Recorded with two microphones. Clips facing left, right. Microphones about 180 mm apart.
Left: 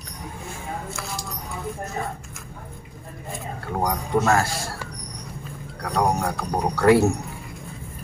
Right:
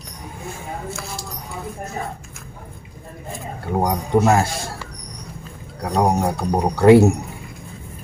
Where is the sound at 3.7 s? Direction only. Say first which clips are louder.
Right 5 dB; 20° right (ahead or behind).